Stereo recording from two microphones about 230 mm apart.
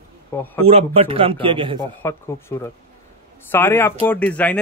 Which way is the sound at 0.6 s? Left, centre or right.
Right.